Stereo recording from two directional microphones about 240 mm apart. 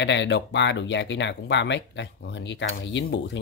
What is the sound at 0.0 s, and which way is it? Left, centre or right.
Speech, left.